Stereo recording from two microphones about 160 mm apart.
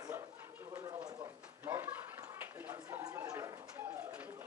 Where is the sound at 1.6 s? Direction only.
15° right (ahead or behind).